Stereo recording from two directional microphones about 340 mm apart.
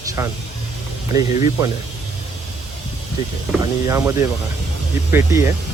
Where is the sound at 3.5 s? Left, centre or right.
Centre.